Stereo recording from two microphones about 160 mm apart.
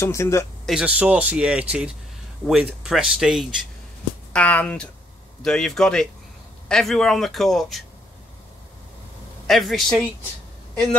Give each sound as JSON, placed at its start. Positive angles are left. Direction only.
{"t": 0.0, "sound": "speech", "side_deg": 15}
{"t": 0.7, "sound": "a man's voice", "side_deg": -5}
{"t": 4.3, "sound": "a man's voice", "side_deg": 10}
{"t": 9.5, "sound": "a man's voice", "side_deg": 0}